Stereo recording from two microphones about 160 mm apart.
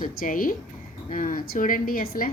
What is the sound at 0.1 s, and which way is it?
A woman's voice, 60° left (ahead or behind).